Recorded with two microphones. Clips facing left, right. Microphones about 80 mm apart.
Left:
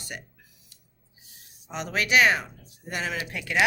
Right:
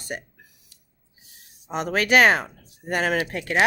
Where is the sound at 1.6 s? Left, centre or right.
Right.